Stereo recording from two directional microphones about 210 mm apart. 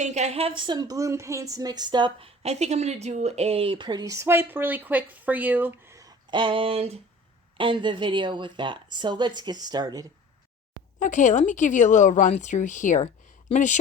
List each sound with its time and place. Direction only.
0.0 s a woman's voice: 35° right (ahead or behind); by 10.1 s 20° right (ahead or behind)
11.0 s a woman's voice: 35° left (ahead or behind)